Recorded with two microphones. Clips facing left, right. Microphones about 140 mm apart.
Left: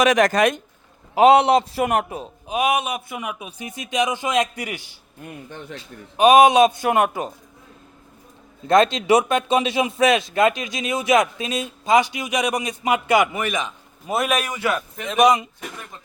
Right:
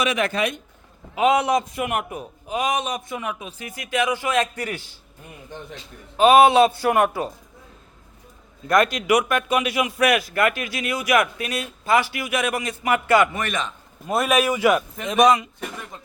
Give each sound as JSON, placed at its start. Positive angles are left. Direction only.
{"t": 0.0, "sound": "speech", "side_deg": 40}
{"t": 0.3, "sound": "speech", "side_deg": 90}
{"t": 1.3, "sound": "a man's voice", "side_deg": 65}
{"t": 1.5, "sound": "a man's voice", "side_deg": 30}
{"t": 6.1, "sound": "a man's voice", "side_deg": 20}
{"t": 8.6, "sound": "a man's voice", "side_deg": 25}
{"t": 14.1, "sound": "a man's voice", "side_deg": 0}